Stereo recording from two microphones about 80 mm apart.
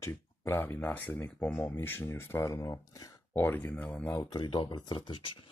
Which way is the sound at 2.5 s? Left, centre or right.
Left.